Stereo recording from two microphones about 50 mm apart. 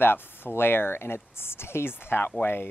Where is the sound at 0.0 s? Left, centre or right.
Left.